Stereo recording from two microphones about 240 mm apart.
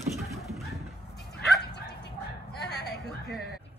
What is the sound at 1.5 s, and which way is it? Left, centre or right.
Bow-wow, left.